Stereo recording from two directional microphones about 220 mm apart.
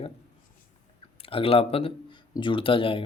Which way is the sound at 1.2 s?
25° left (ahead or behind).